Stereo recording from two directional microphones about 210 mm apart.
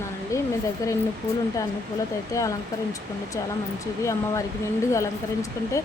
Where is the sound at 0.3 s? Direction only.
15° left (ahead or behind).